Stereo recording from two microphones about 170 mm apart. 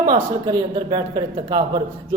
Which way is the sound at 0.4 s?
25° right (ahead or behind).